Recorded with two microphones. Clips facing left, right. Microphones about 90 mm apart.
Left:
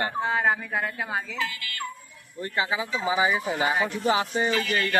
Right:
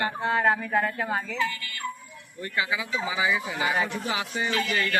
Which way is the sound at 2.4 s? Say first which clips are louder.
Left 2 dB; 30° left (ahead or behind).